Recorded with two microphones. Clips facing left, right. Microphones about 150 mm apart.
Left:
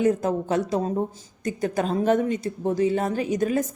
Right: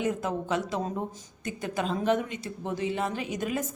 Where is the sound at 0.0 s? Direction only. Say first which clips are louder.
Left 7 dB; 40° left (ahead or behind).